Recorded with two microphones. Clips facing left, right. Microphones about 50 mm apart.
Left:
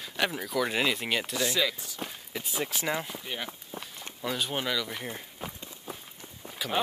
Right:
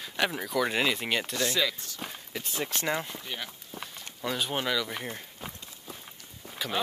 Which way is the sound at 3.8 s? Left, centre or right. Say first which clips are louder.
Right 1 dB; centre.